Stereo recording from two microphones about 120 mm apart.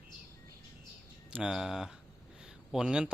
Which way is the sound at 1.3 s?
5° right (ahead or behind).